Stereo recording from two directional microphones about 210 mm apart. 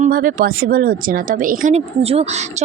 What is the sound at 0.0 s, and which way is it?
A woman's voice, 40° right (ahead or behind).